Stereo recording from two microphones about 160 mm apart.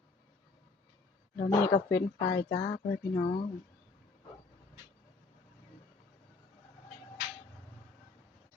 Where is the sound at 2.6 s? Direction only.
40° left (ahead or behind).